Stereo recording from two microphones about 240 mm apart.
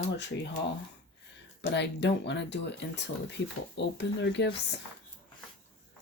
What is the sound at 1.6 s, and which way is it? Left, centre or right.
Speech, left.